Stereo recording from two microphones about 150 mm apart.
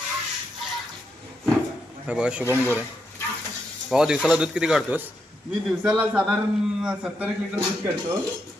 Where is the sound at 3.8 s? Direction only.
5° right (ahead or behind).